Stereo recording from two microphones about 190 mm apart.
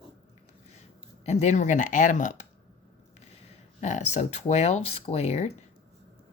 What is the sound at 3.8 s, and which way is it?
Speech, 40° left (ahead or behind).